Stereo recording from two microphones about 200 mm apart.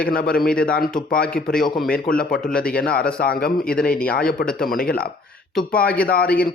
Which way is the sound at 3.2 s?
50° left (ahead or behind).